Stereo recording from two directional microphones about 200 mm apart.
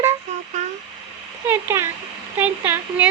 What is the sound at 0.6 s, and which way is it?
Speech, 35° right (ahead or behind).